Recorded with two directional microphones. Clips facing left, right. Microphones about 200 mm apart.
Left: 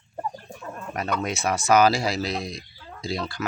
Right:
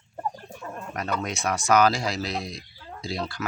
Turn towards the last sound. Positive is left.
turn(degrees=0)  # may be behind; listen again after turning